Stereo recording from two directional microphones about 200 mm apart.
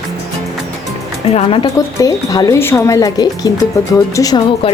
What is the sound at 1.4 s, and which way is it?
Speech, 25° left (ahead or behind).